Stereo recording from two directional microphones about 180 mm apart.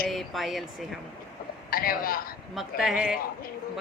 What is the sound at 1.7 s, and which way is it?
Speech, 55° left (ahead or behind).